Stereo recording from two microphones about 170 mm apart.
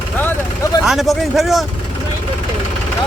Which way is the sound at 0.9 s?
Centre (ahead or behind).